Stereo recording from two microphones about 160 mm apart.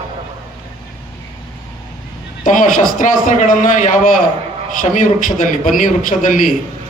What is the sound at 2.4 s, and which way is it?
A man's voice, 55° left (ahead or behind).